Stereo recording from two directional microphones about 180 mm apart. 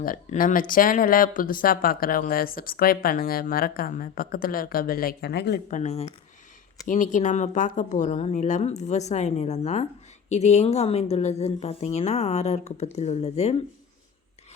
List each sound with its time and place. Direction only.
0.0 s speech: 50° left (ahead or behind); by 5.5 s 65° left (ahead or behind)
5.7 s a woman's voice: 40° left (ahead or behind)